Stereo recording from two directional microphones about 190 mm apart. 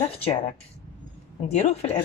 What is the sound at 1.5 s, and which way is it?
Speech, 35° left (ahead or behind).